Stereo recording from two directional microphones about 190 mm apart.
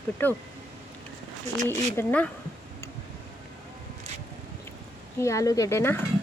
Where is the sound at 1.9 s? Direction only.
10° left (ahead or behind).